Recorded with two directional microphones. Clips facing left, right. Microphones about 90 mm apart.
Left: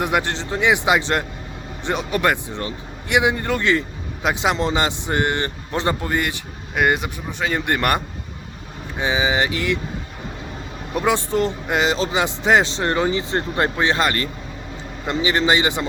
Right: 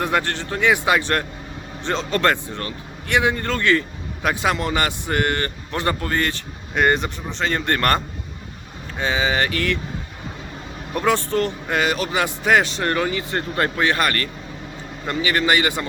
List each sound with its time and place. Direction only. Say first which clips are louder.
0.0 s speech: left 1 dB; 15° left (ahead or behind)
10.9 s speech: even; 15° left (ahead or behind)